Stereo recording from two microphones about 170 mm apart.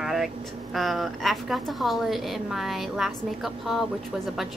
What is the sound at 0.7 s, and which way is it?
A woman's voice, centre (ahead or behind).